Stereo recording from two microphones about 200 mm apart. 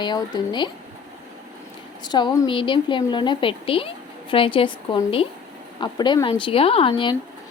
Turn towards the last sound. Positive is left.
turn(degrees=25)  # may be behind; listen again after turning